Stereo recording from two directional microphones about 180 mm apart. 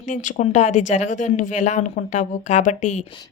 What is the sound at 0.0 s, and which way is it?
Speech, 45° left (ahead or behind).